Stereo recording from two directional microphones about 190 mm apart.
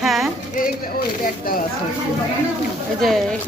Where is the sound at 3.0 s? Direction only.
Centre (ahead or behind).